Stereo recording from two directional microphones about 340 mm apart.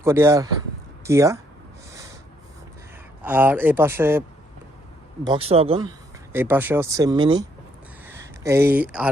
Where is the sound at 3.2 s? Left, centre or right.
Centre.